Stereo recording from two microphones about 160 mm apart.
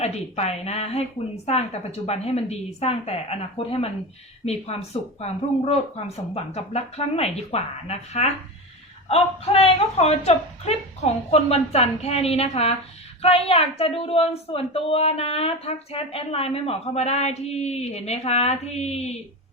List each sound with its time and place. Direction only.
0.0 s a woman's voice: 40° left (ahead or behind)